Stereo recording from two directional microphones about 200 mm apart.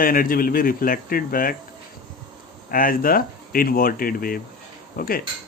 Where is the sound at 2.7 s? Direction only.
45° left (ahead or behind).